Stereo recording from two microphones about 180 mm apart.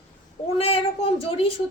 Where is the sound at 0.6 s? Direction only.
35° left (ahead or behind).